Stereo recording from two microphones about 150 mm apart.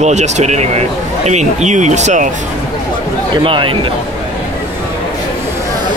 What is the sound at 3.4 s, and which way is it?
Speech, 35° right (ahead or behind).